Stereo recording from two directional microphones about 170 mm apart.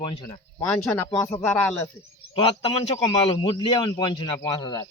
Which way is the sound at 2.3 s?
35° left (ahead or behind).